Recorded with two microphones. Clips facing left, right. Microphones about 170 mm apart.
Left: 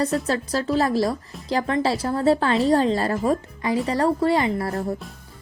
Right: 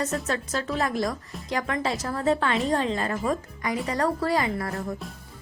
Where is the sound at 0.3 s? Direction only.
30° left (ahead or behind).